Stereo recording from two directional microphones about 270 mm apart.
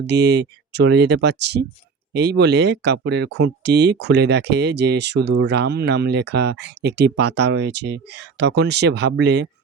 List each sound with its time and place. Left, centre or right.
0.1 s speech: right